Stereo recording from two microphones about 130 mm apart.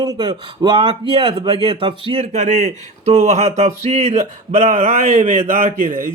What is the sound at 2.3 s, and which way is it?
Speech, 65° right (ahead or behind).